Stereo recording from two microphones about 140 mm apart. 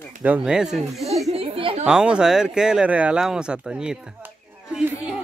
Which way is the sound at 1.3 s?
40° right (ahead or behind).